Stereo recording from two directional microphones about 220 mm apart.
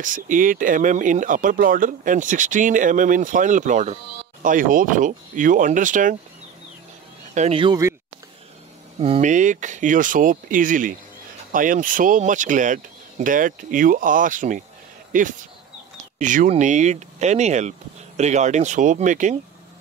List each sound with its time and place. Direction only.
0.0 s speech: 35° right (ahead or behind)
7.3 s speech: 25° right (ahead or behind)
9.0 s speech: 30° right (ahead or behind)